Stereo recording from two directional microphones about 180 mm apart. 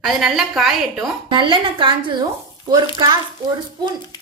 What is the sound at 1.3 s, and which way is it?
Speech, 30° right (ahead or behind).